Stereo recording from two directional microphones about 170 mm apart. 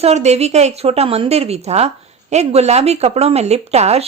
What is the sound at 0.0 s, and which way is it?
Speech, 40° right (ahead or behind).